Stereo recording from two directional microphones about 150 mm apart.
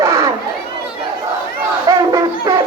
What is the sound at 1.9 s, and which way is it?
Battle cry, 25° right (ahead or behind).